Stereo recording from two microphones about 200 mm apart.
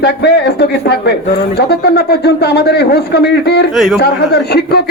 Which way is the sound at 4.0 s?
55° left (ahead or behind).